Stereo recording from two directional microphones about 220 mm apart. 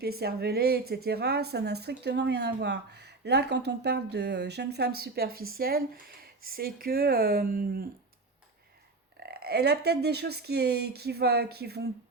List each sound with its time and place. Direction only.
0.0 s speech: 45° right (ahead or behind)
9.2 s speech: 45° right (ahead or behind)